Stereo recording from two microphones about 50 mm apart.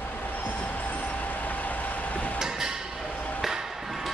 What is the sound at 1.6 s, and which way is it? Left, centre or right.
Vehicle, left.